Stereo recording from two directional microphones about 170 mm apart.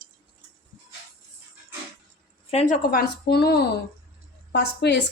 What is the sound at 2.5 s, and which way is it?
Speech, 45° left (ahead or behind).